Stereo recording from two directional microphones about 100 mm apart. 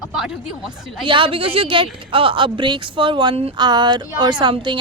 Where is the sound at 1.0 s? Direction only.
60° right (ahead or behind).